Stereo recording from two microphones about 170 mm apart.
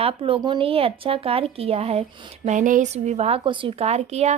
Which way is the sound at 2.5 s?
50° right (ahead or behind).